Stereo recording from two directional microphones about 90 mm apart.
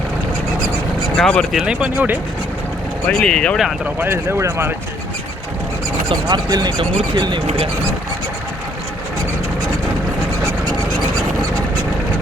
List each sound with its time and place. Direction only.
1.1 s speech: 5° left (ahead or behind)
1.5 s speech: 10° right (ahead or behind)
3.1 s speech: 10° left (ahead or behind)
3.8 s speech: 25° right (ahead or behind)
6.2 s speech: 50° right (ahead or behind)